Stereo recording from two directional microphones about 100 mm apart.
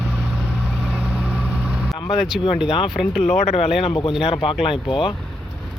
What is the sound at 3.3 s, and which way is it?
Speech, 90° left.